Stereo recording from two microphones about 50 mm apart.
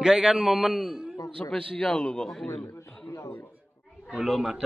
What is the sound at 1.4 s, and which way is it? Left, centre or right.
Speech, centre.